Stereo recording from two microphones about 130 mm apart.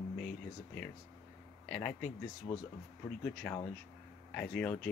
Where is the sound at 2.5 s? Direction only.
45° left (ahead or behind).